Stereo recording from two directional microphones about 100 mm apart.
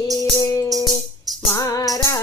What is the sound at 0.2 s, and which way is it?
Music, 35° left (ahead or behind).